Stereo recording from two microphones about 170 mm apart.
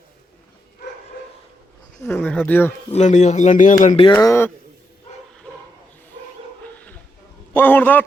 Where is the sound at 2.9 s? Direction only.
45° left (ahead or behind).